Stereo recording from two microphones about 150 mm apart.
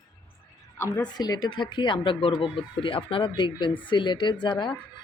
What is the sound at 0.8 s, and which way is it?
A woman's voice, 20° left (ahead or behind).